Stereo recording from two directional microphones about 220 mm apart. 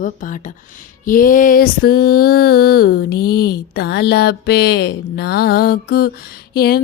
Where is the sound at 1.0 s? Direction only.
40° left (ahead or behind).